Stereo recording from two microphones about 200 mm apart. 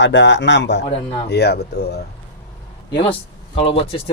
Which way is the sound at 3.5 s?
30° left (ahead or behind).